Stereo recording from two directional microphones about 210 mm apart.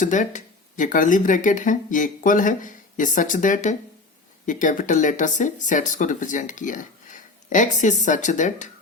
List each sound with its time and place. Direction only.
0.0 s speech: 35° left (ahead or behind)